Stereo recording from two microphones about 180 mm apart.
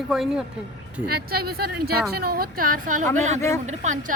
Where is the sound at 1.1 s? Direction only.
60° right (ahead or behind).